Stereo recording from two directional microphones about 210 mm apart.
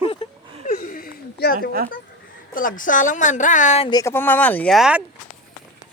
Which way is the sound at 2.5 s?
40° left (ahead or behind).